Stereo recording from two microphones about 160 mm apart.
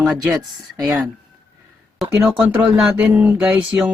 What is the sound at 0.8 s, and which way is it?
Speech, centre (ahead or behind).